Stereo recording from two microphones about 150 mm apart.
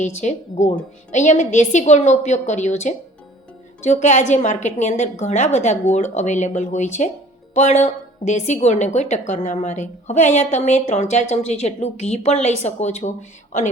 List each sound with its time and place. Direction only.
0.0 s a woman's voice: 50° left (ahead or behind)